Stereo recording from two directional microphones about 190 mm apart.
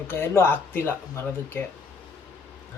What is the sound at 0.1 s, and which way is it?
A man's voice, 10° left (ahead or behind).